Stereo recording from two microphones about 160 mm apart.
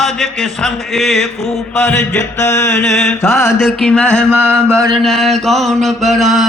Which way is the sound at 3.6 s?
Centre (ahead or behind).